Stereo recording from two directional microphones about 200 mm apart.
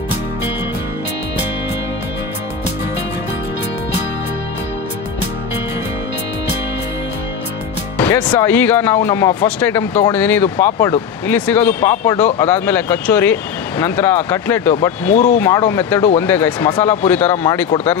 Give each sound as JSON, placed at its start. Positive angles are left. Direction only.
{"t": 8.0, "sound": "a man's voice", "side_deg": 20}